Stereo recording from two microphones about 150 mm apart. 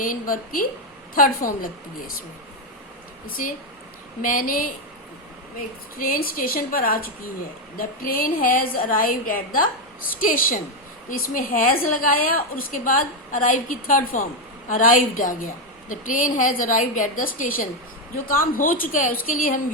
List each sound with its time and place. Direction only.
0.0 s a woman's voice: 65° left (ahead or behind)
4.2 s a woman's voice: 65° left (ahead or behind)
6.0 s a woman's voice: 75° left (ahead or behind)